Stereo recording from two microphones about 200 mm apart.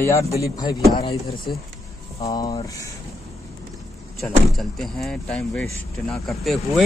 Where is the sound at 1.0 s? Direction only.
25° left (ahead or behind).